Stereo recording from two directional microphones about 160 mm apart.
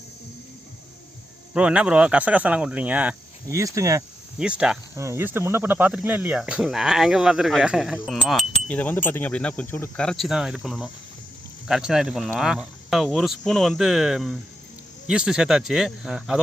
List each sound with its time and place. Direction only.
1.5 s speech: 5° right (ahead or behind)
3.6 s speech: 20° right (ahead or behind)
4.4 s speech: 5° right (ahead or behind)
4.9 s speech: 15° right (ahead or behind)